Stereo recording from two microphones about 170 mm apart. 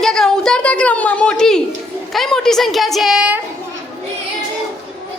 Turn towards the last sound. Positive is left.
turn(degrees=-5)  # may be behind; listen again after turning